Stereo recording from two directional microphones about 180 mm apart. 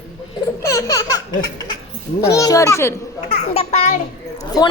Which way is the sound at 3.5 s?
35° left (ahead or behind).